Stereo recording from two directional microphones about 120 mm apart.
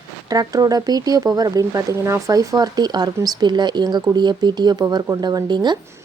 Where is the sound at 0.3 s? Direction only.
30° right (ahead or behind).